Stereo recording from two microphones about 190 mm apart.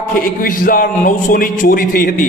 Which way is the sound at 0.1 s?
50° left (ahead or behind).